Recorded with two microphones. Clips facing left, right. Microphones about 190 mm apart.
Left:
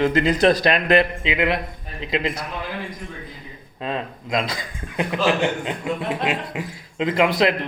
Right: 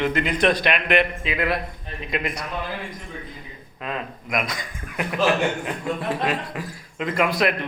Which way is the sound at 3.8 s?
25° left (ahead or behind).